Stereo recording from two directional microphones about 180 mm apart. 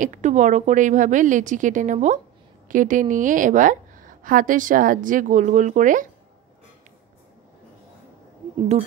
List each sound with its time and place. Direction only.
0.0 s a woman's voice: 45° right (ahead or behind)